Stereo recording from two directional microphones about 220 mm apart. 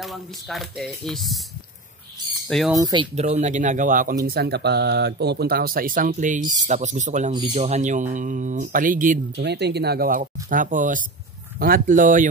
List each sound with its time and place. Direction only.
0.0 s speech: centre (ahead or behind)
2.7 s speech: 15° right (ahead or behind)
3.2 s speech: 30° right (ahead or behind)
4.3 s speech: 45° right (ahead or behind)
9.5 s speech: 50° right (ahead or behind)